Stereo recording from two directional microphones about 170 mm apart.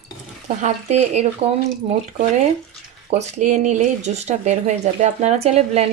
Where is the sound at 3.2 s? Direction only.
45° right (ahead or behind).